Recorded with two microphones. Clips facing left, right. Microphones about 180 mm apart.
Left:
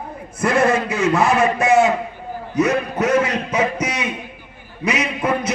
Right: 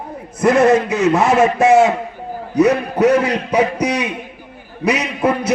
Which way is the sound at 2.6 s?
35° right (ahead or behind).